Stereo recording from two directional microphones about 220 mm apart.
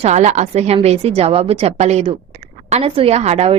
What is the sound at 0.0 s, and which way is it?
A woman's voice, 30° right (ahead or behind).